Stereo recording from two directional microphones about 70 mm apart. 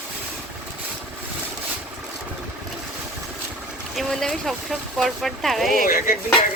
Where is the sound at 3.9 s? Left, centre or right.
Centre.